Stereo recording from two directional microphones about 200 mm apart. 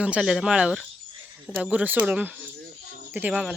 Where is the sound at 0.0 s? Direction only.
5° right (ahead or behind).